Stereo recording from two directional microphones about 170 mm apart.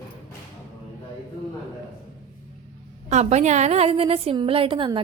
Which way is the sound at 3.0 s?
40° right (ahead or behind).